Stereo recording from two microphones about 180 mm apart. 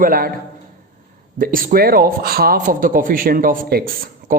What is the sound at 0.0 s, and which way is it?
Speech, 55° right (ahead or behind).